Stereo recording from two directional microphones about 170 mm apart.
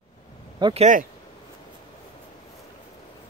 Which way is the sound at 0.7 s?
45° right (ahead or behind).